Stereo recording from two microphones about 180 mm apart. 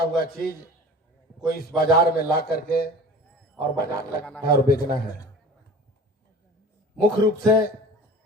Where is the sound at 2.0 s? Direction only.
60° left (ahead or behind).